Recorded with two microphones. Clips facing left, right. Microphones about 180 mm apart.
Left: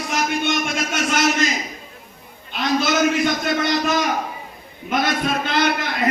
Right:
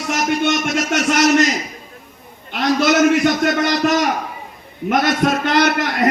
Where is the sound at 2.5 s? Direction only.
70° right (ahead or behind).